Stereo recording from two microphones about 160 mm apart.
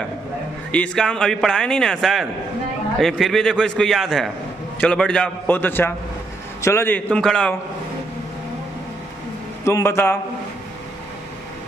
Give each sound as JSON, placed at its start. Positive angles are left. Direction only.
{"t": 0.7, "sound": "a man's voice", "side_deg": 5}
{"t": 9.7, "sound": "a man's voice", "side_deg": 15}